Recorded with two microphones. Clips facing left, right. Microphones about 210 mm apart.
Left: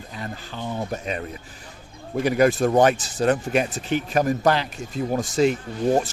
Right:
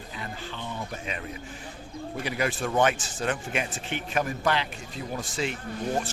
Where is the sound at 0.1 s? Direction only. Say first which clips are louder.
Left 4 dB; 40° left (ahead or behind).